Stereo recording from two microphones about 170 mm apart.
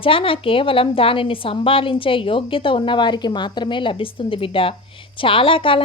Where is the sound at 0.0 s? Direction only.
30° left (ahead or behind).